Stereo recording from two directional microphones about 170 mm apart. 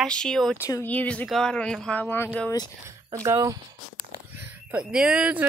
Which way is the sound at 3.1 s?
20° right (ahead or behind).